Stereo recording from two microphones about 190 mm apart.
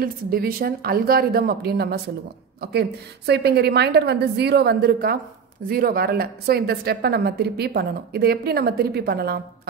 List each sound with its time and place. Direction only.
0.0 s a woman's voice: 50° right (ahead or behind)